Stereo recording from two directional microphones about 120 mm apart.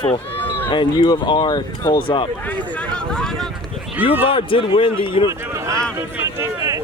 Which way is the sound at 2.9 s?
5° left (ahead or behind).